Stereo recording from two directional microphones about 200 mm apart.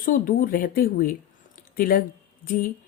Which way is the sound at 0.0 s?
45° left (ahead or behind).